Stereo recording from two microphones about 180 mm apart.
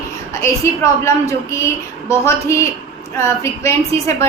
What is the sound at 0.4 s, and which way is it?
A woman's voice, 15° left (ahead or behind).